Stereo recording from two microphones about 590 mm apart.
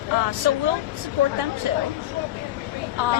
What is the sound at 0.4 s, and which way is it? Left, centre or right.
Speech, right.